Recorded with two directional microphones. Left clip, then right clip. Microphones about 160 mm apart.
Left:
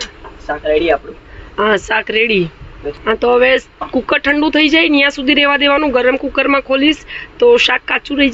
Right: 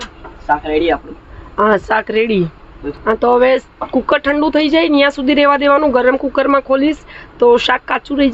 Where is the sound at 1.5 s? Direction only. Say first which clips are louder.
Right 1 dB; 15° right (ahead or behind).